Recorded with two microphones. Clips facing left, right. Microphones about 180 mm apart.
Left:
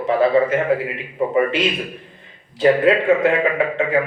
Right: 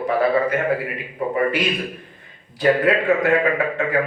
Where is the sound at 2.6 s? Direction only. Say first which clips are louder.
Left 3 dB; 25° left (ahead or behind).